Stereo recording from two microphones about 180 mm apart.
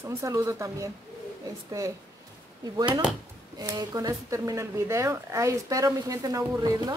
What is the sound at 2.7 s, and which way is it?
Speech, 20° right (ahead or behind).